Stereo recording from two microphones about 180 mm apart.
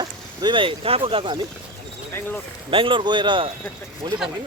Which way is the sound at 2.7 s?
30° right (ahead or behind).